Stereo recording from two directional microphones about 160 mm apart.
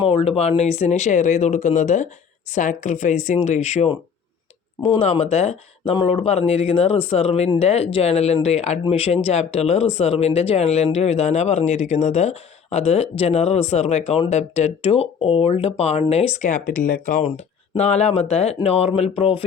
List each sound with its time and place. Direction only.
0.0 s speech: 35° left (ahead or behind); by 17.2 s 60° left (ahead or behind)
17.2 s speech: 45° left (ahead or behind)